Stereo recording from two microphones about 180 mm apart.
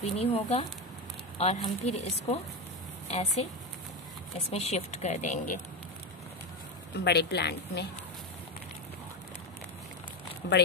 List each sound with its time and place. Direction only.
0.2 s speech: 35° left (ahead or behind)
4.5 s speech: 35° left (ahead or behind)
7.1 s speech: 65° left (ahead or behind)
10.4 s speech: 70° left (ahead or behind)